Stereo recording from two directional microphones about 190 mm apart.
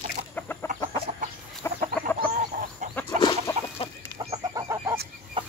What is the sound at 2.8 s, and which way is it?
Chicken, 40° right (ahead or behind).